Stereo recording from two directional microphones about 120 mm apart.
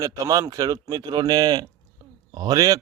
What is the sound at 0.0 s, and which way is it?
Speech, 30° right (ahead or behind).